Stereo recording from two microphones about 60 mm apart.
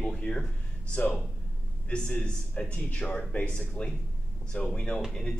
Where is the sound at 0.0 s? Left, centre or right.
Centre.